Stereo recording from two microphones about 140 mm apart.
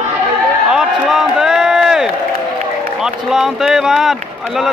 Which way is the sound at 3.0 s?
5° right (ahead or behind).